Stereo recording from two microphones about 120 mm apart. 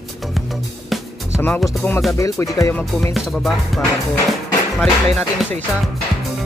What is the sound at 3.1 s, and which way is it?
Music, centre (ahead or behind).